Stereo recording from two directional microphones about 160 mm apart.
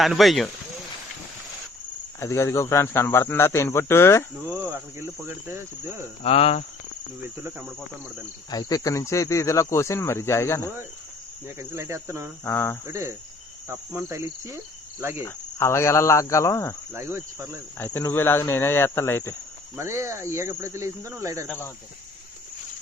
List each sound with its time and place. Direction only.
0.0 s speech: centre (ahead or behind)
2.2 s speech: 20° left (ahead or behind)
4.6 s speech: 15° right (ahead or behind)
6.2 s cricket: 40° left (ahead or behind)
8.4 s speech: 25° left (ahead or behind)
11.4 s speech: 20° right (ahead or behind)
12.5 s speech: 15° left (ahead or behind)
12.8 s speech: 15° right (ahead or behind)
15.2 s speech: 15° left (ahead or behind)
16.9 s speech: 15° right (ahead or behind)
17.7 s speech: 10° left (ahead or behind)
19.7 s speech: 15° right (ahead or behind)
21.4 s speech: 10° left (ahead or behind)